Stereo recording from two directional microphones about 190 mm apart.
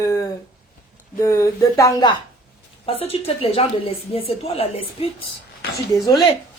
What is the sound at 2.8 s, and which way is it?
A woman's voice, 30° left (ahead or behind).